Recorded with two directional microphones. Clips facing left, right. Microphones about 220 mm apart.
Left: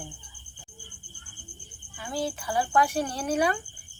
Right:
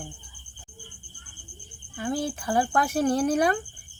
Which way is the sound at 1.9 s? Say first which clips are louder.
Right 3 dB; 50° right (ahead or behind).